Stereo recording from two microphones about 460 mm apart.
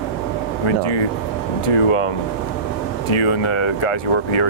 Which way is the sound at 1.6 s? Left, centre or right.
Left.